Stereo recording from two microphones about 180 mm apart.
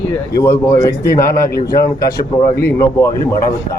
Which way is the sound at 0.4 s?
15° left (ahead or behind).